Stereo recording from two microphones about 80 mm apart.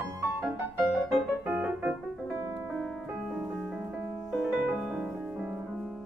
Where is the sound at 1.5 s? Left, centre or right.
Right.